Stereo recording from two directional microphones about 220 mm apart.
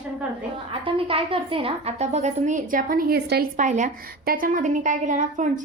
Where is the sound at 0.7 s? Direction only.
25° right (ahead or behind).